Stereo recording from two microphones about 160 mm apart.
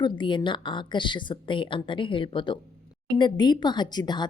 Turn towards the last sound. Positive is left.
turn(degrees=25)  # may be behind; listen again after turning